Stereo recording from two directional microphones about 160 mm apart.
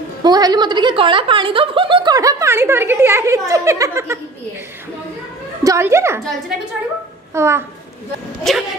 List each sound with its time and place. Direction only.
0.2 s speech: 25° right (ahead or behind)
5.6 s a woman's voice: 20° right (ahead or behind)
7.3 s a woman's voice: 15° right (ahead or behind)
8.5 s speech: centre (ahead or behind)